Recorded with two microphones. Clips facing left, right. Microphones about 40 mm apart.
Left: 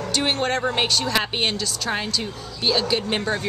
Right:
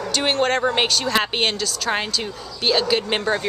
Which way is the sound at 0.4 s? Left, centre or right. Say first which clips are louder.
Right 3 dB; centre.